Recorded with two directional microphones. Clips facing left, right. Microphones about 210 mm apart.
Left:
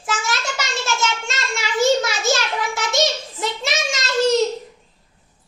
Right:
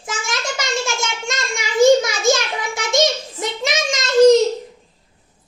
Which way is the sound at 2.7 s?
20° right (ahead or behind).